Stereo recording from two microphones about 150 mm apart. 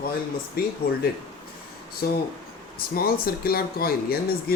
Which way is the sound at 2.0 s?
90° left.